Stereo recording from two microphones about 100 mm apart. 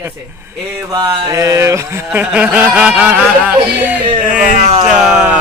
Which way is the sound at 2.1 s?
10° right (ahead or behind).